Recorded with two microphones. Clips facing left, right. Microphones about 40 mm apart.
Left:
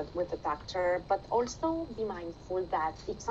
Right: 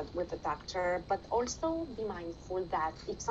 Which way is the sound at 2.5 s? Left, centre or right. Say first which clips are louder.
Left 3 dB; left.